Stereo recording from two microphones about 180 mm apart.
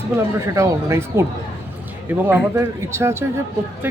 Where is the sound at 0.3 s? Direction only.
15° right (ahead or behind).